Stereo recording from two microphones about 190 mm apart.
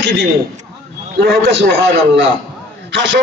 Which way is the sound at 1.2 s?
65° right (ahead or behind).